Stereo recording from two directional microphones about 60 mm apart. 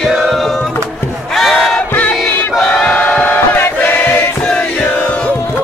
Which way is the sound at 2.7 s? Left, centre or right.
Centre.